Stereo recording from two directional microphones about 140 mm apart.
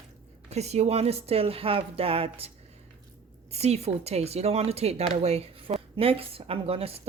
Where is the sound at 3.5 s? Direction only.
50° right (ahead or behind).